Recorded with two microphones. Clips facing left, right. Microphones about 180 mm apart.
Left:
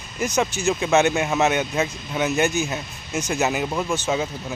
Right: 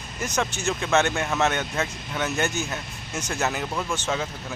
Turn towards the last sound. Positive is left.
turn(degrees=10)  # may be behind; listen again after turning